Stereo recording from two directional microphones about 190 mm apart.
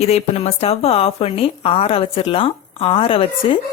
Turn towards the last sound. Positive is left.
turn(degrees=30)  # may be behind; listen again after turning